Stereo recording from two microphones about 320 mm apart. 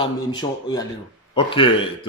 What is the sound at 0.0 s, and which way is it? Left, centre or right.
A man's voice, centre.